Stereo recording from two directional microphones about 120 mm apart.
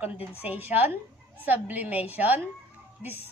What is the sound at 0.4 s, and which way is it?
A child's voice, 15° right (ahead or behind).